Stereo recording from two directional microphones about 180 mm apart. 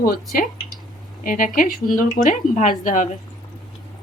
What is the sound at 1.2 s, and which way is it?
Speech, 50° left (ahead or behind).